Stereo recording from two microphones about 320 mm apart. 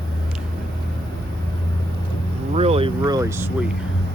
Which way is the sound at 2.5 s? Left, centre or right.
Centre.